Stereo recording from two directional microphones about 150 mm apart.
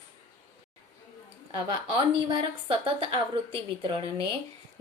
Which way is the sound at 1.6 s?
35° right (ahead or behind).